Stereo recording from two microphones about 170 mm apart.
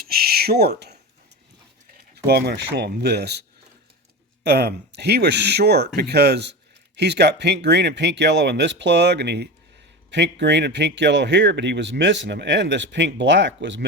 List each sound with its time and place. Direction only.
0.0 s a sound: 65° right (ahead or behind)
2.1 s speech: 70° right (ahead or behind)
4.4 s a man's voice: 75° right (ahead or behind)
10.1 s speech: 90° right